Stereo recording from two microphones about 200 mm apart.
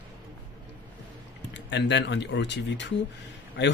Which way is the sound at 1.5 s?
60° left (ahead or behind).